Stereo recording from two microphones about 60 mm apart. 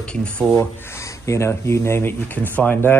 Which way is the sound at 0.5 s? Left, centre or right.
Left.